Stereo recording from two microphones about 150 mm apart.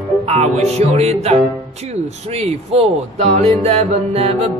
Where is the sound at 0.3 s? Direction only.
45° right (ahead or behind).